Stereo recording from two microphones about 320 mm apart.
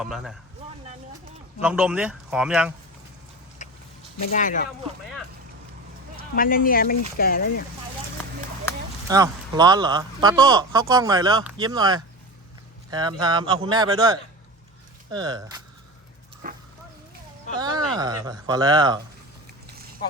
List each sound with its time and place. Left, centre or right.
0.0 s speech: centre
1.6 s speech: centre
3.6 s a sound: left
4.3 s speech: left
6.3 s speech: left
9.0 s speech: centre
16.4 s dog: right
17.6 s speech: centre